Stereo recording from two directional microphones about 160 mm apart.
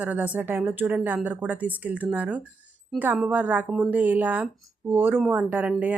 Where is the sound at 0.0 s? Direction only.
10° right (ahead or behind).